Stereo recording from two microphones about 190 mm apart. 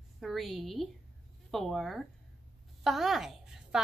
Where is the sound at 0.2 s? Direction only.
Centre (ahead or behind).